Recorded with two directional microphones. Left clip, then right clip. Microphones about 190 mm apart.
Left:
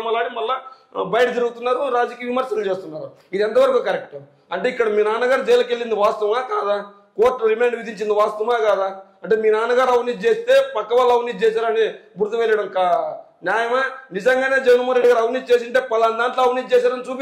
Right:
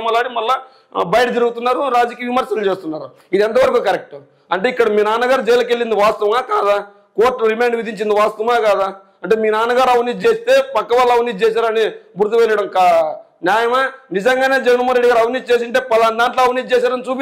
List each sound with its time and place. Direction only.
0.0 s a man's voice: 55° right (ahead or behind)